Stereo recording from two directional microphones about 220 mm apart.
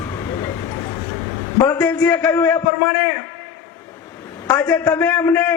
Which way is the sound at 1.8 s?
5° left (ahead or behind).